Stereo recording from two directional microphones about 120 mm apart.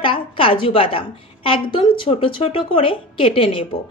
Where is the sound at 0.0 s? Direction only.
50° left (ahead or behind).